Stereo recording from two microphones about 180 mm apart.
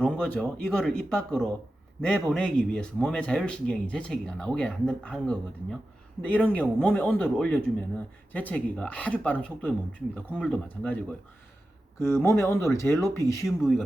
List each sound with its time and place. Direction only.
0.0 s speech: 5° left (ahead or behind)
13.4 s speech: centre (ahead or behind)